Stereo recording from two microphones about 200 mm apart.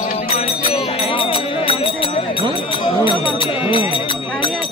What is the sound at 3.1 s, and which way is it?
Music, 25° left (ahead or behind).